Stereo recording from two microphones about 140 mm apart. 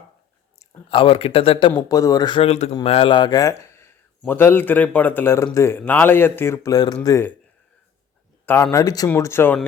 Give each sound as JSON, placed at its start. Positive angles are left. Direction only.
{"t": 0.9, "sound": "speech", "side_deg": 40}
{"t": 1.9, "sound": "speech", "side_deg": 25}
{"t": 8.7, "sound": "speech", "side_deg": 25}